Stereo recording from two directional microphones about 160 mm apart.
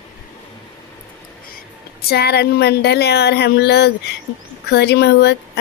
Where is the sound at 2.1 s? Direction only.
90° left.